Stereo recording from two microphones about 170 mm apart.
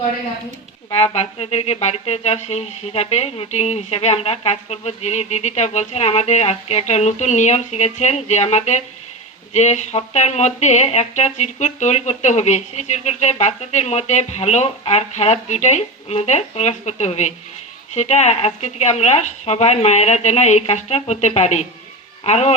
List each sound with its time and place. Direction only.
0.9 s speech: 35° left (ahead or behind)